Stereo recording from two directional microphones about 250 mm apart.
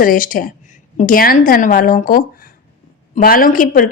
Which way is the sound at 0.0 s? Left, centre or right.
Left.